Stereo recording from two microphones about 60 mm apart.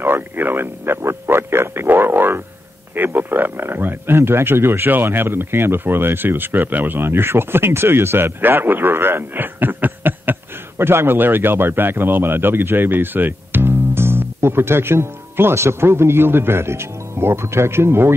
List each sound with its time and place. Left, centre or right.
0.0 s a man's voice: right